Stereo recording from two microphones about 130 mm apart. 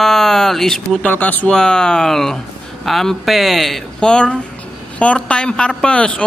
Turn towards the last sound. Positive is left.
turn(degrees=10)  # may be behind; listen again after turning